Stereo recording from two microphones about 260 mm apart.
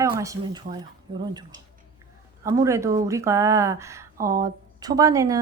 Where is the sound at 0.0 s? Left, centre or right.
Centre.